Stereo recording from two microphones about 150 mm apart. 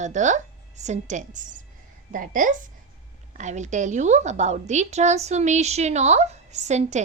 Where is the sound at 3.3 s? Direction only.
50° right (ahead or behind).